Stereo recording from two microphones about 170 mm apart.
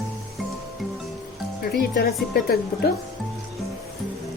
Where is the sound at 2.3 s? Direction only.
65° left (ahead or behind).